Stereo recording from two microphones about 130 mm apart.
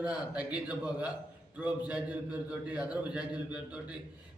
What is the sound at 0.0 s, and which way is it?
Speech, 10° right (ahead or behind).